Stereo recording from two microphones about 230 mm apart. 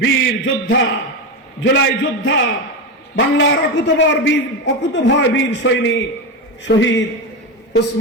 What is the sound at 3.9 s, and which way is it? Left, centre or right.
A man's voice, left.